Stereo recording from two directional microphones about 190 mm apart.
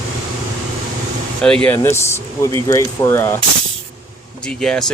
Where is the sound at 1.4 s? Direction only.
5° left (ahead or behind).